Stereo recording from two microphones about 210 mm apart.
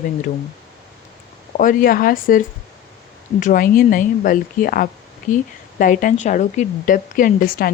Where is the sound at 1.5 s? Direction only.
40° left (ahead or behind).